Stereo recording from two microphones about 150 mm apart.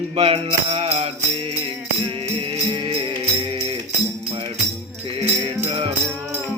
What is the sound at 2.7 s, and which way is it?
Music, 40° right (ahead or behind).